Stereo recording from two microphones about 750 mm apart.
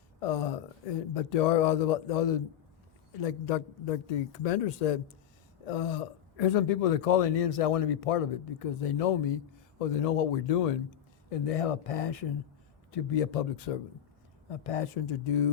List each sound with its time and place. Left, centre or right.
0.2 s speech: left